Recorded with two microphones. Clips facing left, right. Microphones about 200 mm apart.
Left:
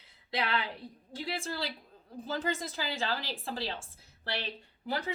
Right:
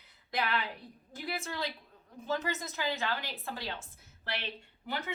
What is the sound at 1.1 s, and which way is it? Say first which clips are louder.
A woman's voice: left 1 dB; 30° left (ahead or behind).